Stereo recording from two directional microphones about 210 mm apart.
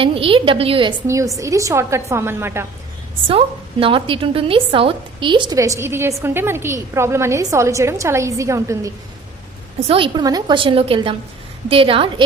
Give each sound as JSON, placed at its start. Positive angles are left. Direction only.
{"t": 0.0, "sound": "a woman's voice", "side_deg": -25}
{"t": 3.2, "sound": "a woman's voice", "side_deg": -25}
{"t": 9.8, "sound": "a woman's voice", "side_deg": -25}